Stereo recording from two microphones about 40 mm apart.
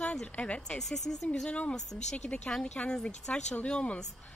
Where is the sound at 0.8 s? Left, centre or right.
Centre.